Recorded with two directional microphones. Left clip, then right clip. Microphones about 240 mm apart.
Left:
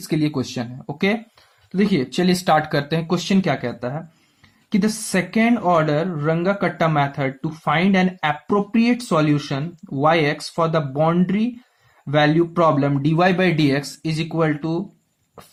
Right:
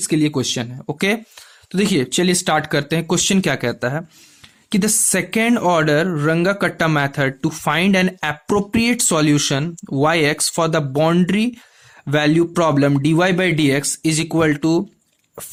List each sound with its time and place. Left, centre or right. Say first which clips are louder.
0.1 s speech: right 4 dB; right